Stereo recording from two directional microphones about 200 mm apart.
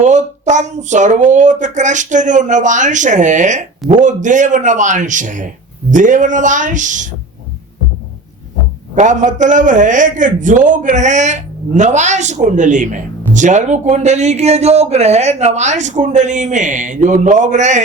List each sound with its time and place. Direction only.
0.0 s a man's voice: 35° right (ahead or behind)
9.0 s a man's voice: 40° right (ahead or behind)